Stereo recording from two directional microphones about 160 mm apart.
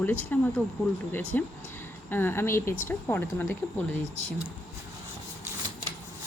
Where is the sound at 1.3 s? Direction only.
15° left (ahead or behind).